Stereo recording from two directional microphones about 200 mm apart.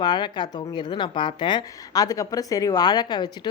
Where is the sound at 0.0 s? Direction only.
20° left (ahead or behind).